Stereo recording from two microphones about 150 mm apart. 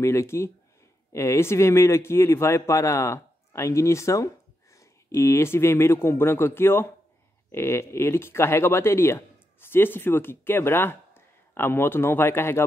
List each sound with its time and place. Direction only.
0.0 s a man's voice: 20° left (ahead or behind)